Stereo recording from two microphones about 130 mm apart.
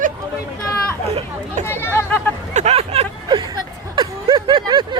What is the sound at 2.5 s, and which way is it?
Vehicle, 60° right (ahead or behind).